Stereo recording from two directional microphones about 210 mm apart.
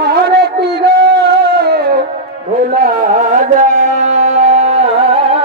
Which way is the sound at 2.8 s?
40° right (ahead or behind).